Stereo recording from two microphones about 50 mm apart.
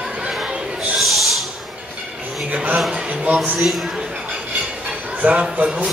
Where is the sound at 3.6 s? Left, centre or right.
Centre.